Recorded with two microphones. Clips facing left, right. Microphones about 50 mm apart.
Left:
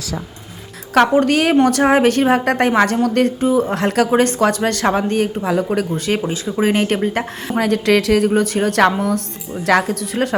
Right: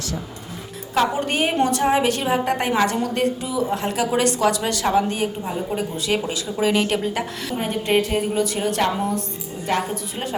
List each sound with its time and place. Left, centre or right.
1.1 s a woman's voice: left
1.5 s a woman's voice: left
4.1 s a woman's voice: left
5.4 s a woman's voice: left
5.7 s a woman's voice: left
6.3 s speech: left
7.6 s a woman's voice: left
8.4 s a woman's voice: left